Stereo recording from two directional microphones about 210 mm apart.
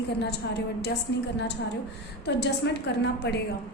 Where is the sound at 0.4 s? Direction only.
55° left (ahead or behind).